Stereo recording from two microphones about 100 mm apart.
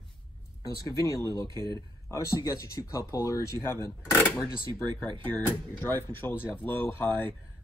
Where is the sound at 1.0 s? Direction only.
35° left (ahead or behind).